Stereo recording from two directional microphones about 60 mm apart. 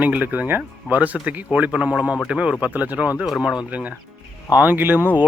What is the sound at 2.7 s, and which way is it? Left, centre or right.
Speech, right.